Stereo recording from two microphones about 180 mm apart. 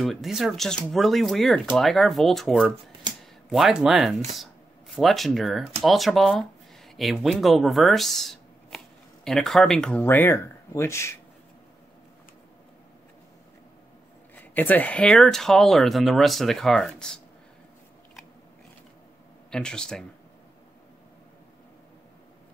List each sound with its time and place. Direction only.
0.0 s speech: centre (ahead or behind)
3.1 s a sound: 25° right (ahead or behind)
3.4 s speech: centre (ahead or behind); by 11.1 s 15° left (ahead or behind)
14.3 s speech: 10° left (ahead or behind)
19.5 s speech: 5° left (ahead or behind)